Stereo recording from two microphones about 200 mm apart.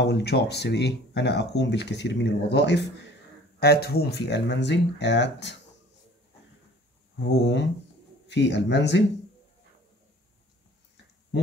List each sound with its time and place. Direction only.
0.0 s speech: 55° left (ahead or behind)
7.2 s speech: 60° left (ahead or behind)